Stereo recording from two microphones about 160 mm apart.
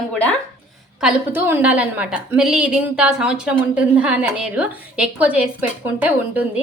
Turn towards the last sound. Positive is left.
turn(degrees=-10)  # may be behind; listen again after turning